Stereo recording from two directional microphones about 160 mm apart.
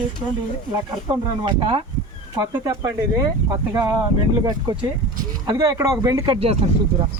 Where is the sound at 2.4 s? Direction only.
20° right (ahead or behind).